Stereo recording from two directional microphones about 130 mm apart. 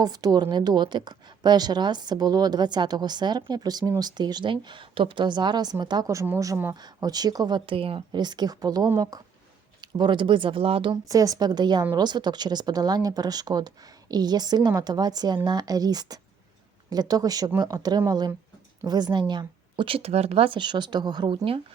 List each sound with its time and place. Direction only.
0.0 s a woman's voice: 30° right (ahead or behind)
11.1 s a woman's voice: 30° right (ahead or behind)